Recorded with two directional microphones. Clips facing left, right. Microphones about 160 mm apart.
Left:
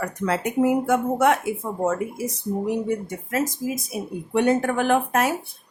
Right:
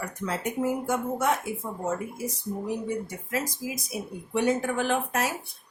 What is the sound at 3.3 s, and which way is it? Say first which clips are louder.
Speech: left 6 dB; 50° left (ahead or behind).